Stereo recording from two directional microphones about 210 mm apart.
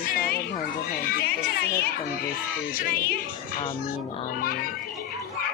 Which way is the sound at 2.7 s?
45° left (ahead or behind).